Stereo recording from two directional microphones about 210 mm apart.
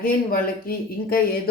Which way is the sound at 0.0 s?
45° left (ahead or behind).